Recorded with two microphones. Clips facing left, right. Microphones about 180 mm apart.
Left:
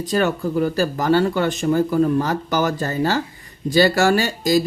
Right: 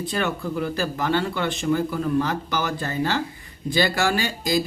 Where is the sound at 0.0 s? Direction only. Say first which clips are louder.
Left 6 dB; 40° left (ahead or behind).